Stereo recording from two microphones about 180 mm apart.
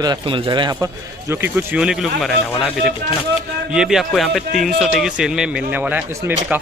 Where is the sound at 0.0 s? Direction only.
25° right (ahead or behind).